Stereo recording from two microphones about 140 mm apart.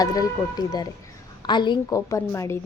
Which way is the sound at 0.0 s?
25° left (ahead or behind).